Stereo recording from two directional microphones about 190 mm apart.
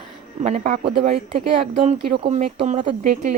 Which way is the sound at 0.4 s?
40° right (ahead or behind).